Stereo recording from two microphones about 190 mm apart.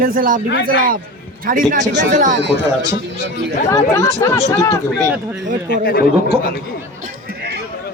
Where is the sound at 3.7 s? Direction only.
15° left (ahead or behind).